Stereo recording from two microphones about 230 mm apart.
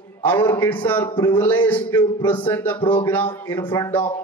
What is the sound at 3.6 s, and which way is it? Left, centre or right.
Speech, centre.